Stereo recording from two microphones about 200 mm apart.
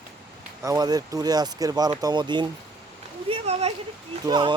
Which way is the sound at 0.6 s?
20° right (ahead or behind).